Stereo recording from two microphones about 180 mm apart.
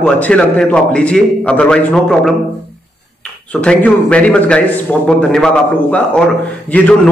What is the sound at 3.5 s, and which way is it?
A man's voice, 5° left (ahead or behind).